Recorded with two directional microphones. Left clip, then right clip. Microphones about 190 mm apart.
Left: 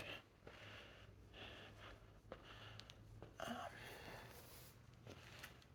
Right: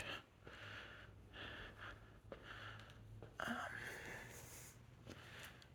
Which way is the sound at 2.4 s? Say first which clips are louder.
Right 4 dB; 30° right (ahead or behind).